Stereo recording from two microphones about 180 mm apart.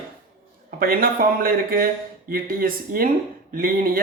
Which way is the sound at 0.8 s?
55° right (ahead or behind).